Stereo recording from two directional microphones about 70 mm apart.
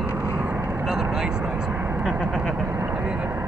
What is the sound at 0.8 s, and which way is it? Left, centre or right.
Vehicle, centre.